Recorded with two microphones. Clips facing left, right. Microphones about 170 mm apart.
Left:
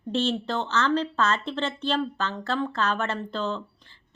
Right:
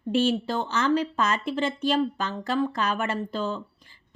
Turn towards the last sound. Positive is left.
turn(degrees=-10)  # may be behind; listen again after turning